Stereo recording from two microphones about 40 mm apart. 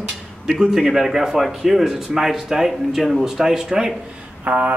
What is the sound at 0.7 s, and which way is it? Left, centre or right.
Speech, centre.